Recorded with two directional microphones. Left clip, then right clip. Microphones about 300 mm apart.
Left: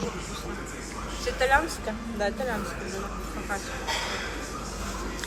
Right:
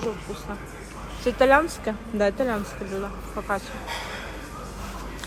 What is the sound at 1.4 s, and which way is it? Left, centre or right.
Speech, centre.